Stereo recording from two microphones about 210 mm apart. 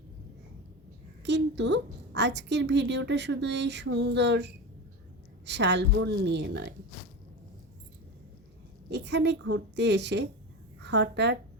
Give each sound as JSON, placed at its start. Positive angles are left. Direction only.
{"t": 1.2, "sound": "a woman's voice", "side_deg": -55}
{"t": 8.9, "sound": "a woman's voice", "side_deg": -55}